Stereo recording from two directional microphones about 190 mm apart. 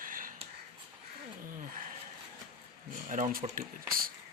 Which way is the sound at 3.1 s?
45° right (ahead or behind).